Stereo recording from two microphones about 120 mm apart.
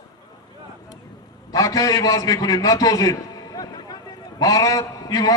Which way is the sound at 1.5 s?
30° left (ahead or behind).